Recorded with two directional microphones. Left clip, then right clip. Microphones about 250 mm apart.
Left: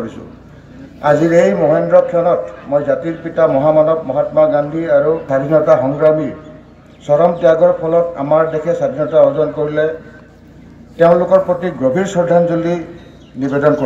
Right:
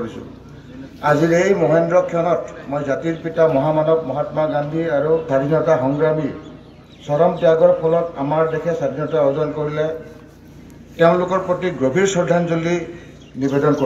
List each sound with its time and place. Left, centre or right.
1.0 s a man's voice: left
11.0 s a man's voice: left